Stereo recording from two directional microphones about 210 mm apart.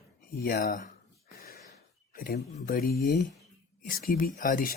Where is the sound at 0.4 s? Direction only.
40° left (ahead or behind).